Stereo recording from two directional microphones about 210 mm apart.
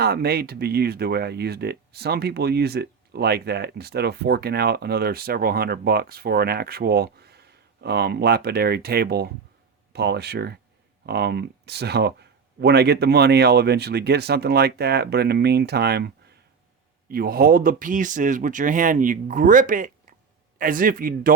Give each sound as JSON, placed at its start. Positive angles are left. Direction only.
{"t": 0.0, "sound": "speech", "side_deg": -50}